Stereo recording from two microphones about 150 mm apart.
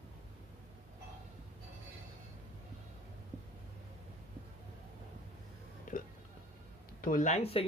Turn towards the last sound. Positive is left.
turn(degrees=45)  # may be behind; listen again after turning